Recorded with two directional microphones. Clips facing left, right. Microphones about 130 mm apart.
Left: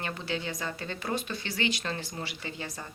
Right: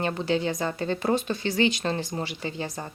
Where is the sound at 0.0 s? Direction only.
30° right (ahead or behind).